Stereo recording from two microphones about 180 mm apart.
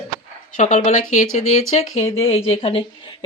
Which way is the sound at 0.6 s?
40° left (ahead or behind).